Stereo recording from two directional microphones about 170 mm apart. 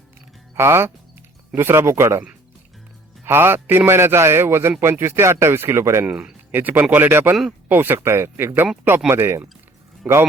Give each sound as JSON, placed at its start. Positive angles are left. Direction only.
{"t": 0.5, "sound": "speech", "side_deg": -15}
{"t": 3.2, "sound": "speech", "side_deg": -15}
{"t": 10.0, "sound": "speech", "side_deg": -5}